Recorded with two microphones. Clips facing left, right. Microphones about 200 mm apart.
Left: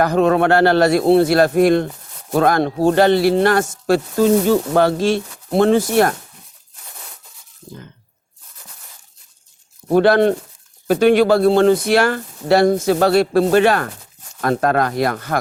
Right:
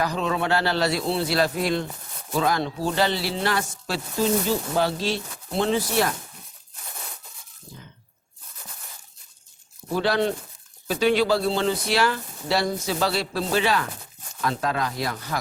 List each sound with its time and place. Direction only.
0.0 s speech: 55° left (ahead or behind)
9.9 s speech: 55° left (ahead or behind)